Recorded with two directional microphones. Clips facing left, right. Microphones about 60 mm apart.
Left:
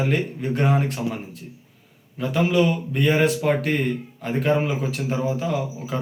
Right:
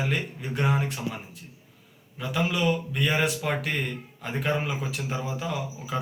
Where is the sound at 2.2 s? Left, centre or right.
Left.